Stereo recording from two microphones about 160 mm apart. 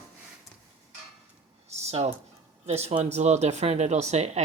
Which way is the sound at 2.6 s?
40° right (ahead or behind).